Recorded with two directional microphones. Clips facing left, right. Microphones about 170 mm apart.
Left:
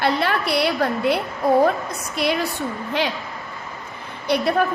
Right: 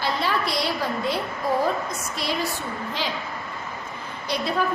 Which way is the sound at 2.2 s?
60° left (ahead or behind).